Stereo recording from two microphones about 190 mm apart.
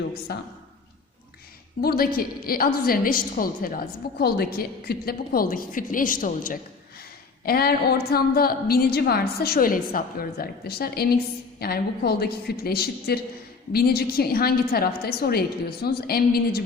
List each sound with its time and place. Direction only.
0.3 s a woman's voice: 55° left (ahead or behind)
1.8 s a woman's voice: 50° left (ahead or behind)